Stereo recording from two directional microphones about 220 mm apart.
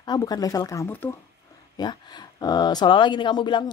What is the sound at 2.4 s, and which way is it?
Speech, 20° left (ahead or behind).